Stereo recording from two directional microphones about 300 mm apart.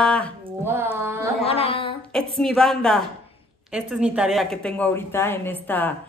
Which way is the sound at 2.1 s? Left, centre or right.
Centre.